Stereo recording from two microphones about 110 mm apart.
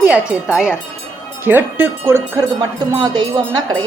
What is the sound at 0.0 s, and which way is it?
Speech, 10° right (ahead or behind).